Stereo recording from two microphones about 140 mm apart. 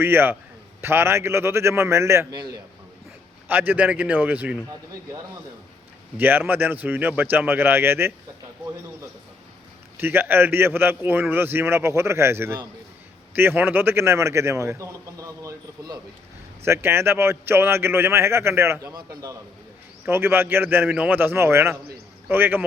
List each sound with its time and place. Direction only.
0.0 s a man's voice: 15° right (ahead or behind)
3.5 s speech: 15° right (ahead or behind)
6.1 s speech: 15° right (ahead or behind)
10.0 s a man's voice: 15° right (ahead or behind)